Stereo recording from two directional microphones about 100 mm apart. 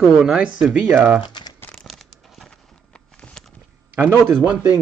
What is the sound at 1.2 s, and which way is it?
Speech, 50° left (ahead or behind).